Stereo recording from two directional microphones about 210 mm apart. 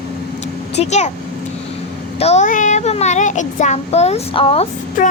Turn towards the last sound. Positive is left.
turn(degrees=35)  # may be behind; listen again after turning